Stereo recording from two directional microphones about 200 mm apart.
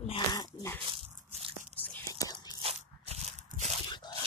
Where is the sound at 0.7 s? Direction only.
25° right (ahead or behind).